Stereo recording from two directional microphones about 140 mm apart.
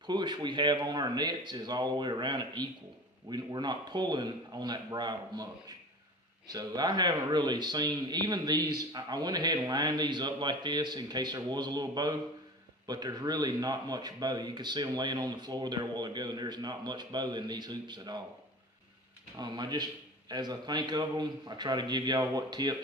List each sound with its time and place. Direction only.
0.0 s a man's voice: 30° right (ahead or behind)
19.3 s a man's voice: 30° right (ahead or behind)